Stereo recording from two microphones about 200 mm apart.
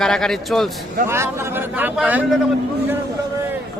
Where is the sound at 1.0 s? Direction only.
10° right (ahead or behind).